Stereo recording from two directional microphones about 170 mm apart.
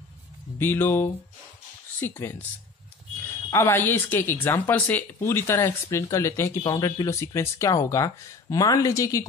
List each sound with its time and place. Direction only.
0.6 s speech: 10° left (ahead or behind)
3.4 s speech: 15° left (ahead or behind)